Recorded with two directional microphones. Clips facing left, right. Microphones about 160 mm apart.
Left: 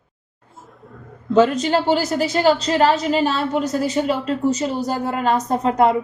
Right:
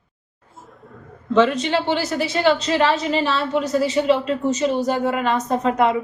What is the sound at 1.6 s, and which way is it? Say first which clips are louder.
A woman's voice: left 3 dB; 40° left (ahead or behind).